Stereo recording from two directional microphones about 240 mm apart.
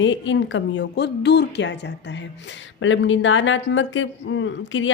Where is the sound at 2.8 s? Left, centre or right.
Left.